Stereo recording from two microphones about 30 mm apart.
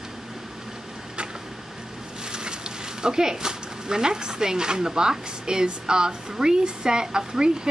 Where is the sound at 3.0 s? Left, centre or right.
Right.